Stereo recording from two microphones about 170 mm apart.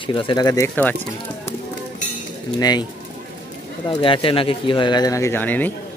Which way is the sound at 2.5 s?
25° left (ahead or behind).